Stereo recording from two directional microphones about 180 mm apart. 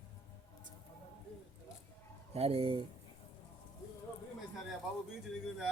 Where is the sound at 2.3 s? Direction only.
35° right (ahead or behind).